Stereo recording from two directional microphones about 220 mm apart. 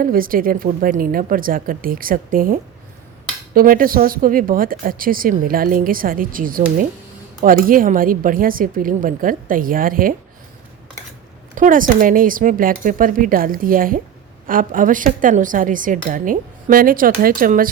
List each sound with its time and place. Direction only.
0.0 s speech: 40° right (ahead or behind)
11.5 s speech: 40° right (ahead or behind)